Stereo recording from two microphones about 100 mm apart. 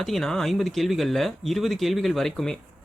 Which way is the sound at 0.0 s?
5° left (ahead or behind).